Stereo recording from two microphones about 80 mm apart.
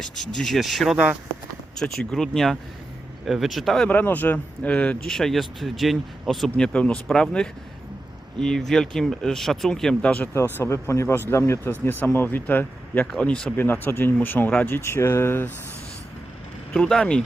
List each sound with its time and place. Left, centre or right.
0.0 s speech: centre
3.8 s speech: left
5.0 s speech: centre
10.3 s speech: left
11.6 s speech: left
13.1 s speech: centre
13.6 s speech: left
16.7 s speech: centre